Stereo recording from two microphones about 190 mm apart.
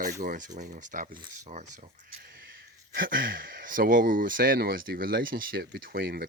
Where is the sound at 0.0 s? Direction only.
45° right (ahead or behind).